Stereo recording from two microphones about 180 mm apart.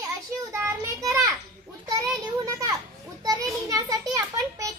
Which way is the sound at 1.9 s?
20° right (ahead or behind).